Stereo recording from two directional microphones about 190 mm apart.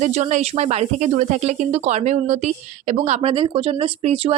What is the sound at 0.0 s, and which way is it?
Speech, 40° right (ahead or behind).